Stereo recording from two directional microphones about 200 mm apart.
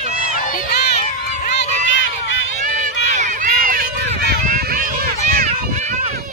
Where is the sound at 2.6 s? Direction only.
40° right (ahead or behind).